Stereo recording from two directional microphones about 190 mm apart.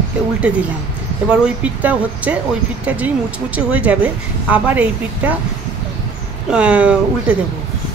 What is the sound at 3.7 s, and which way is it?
A woman's voice, 5° right (ahead or behind).